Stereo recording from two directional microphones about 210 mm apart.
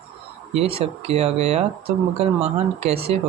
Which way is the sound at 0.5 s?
30° right (ahead or behind).